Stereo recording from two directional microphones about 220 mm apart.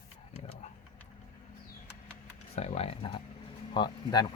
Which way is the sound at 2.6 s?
30° left (ahead or behind).